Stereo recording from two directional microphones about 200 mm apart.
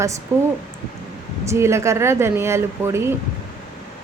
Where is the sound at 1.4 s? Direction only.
15° right (ahead or behind).